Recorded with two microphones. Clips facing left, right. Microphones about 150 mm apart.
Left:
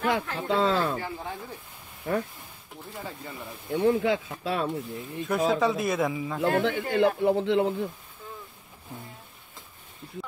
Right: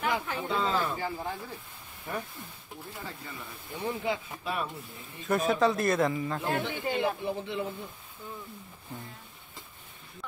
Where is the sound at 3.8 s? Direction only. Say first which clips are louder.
Left 8 dB; 90° left.